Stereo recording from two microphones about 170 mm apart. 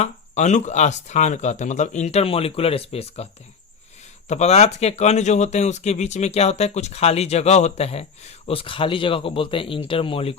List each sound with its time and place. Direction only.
0.0 s speech: 45° left (ahead or behind)
4.3 s speech: 40° left (ahead or behind)